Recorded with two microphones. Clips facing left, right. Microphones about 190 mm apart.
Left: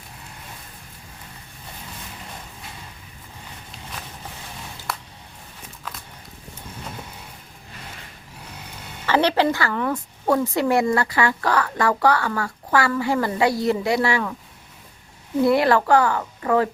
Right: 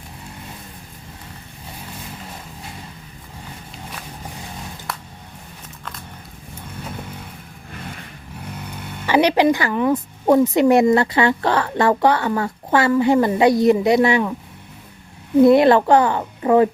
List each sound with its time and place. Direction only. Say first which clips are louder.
9.0 s a woman's voice: right 4 dB; 15° right (ahead or behind)
15.4 s a woman's voice: right 4 dB; 20° right (ahead or behind)